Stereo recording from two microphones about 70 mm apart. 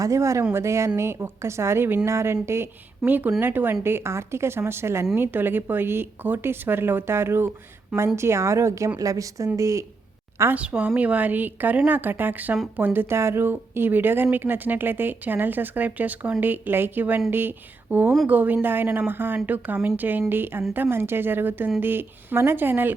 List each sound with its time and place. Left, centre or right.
0.0 s a woman's voice: right
10.5 s speech: centre